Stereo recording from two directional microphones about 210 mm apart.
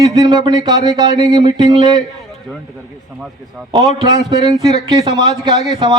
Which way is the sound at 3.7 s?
20° right (ahead or behind).